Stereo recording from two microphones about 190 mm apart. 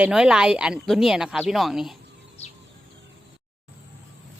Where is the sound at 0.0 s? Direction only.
5° right (ahead or behind).